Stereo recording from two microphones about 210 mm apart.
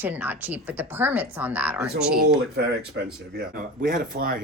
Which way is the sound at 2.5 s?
50° right (ahead or behind).